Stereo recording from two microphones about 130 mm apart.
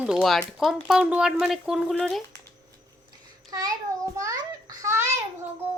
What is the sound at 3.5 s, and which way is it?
Child singing, 30° right (ahead or behind).